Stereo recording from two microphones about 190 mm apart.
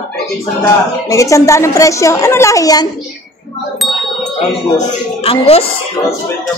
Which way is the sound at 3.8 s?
Centre (ahead or behind).